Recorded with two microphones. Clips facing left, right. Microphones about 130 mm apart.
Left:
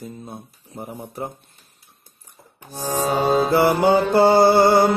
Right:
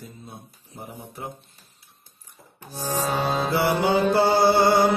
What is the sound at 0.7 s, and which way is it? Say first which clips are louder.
Mantra: left 6 dB; 50° left (ahead or behind).